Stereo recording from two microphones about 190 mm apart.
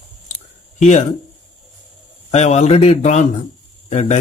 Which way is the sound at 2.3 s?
35° left (ahead or behind).